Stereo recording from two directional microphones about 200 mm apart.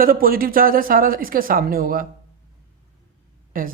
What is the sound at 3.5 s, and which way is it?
Speech, 45° right (ahead or behind).